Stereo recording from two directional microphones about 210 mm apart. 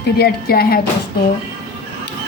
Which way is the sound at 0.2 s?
45° left (ahead or behind).